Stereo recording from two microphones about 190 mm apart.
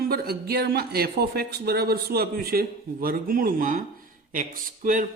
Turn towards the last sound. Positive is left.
turn(degrees=-45)  # may be behind; listen again after turning